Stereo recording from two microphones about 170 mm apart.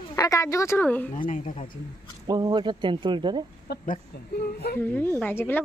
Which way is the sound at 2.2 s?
25° right (ahead or behind).